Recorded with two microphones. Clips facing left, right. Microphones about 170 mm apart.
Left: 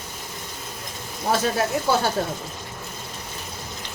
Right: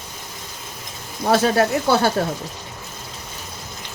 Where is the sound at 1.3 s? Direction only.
75° right (ahead or behind).